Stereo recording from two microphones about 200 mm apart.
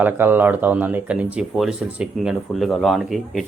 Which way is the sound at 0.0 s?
10° right (ahead or behind).